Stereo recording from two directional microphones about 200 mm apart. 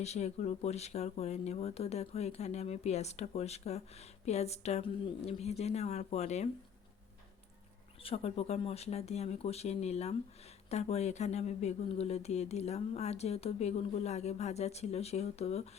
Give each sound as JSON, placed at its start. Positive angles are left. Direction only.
{"t": 0.0, "sound": "speech", "side_deg": 35}
{"t": 8.0, "sound": "speech", "side_deg": 30}